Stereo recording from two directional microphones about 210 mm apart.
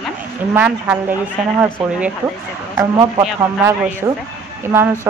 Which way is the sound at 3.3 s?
5° right (ahead or behind).